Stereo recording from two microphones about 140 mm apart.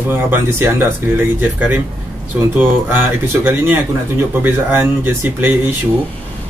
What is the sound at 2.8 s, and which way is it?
Speech, 15° right (ahead or behind).